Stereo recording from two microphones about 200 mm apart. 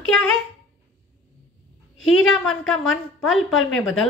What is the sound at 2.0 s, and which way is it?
Speech, 90° left.